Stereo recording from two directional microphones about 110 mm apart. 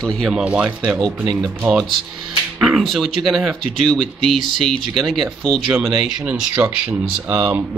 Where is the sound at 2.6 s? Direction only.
Centre (ahead or behind).